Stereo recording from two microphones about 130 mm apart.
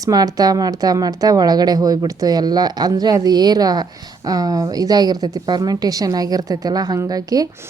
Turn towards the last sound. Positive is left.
turn(degrees=-30)  # may be behind; listen again after turning